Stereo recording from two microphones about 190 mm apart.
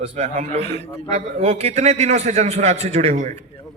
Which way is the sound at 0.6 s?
30° left (ahead or behind).